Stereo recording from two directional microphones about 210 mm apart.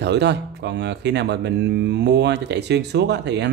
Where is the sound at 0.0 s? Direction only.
55° right (ahead or behind).